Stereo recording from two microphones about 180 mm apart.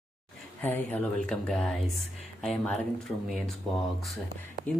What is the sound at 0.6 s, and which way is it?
Speech, 10° left (ahead or behind).